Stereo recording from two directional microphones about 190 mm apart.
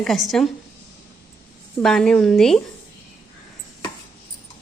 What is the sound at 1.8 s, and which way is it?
Speech, 5° left (ahead or behind).